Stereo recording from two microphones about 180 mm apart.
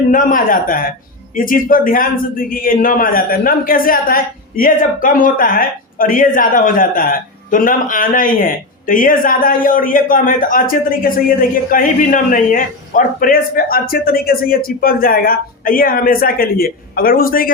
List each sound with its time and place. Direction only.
0.1 s a man's voice: 50° left (ahead or behind)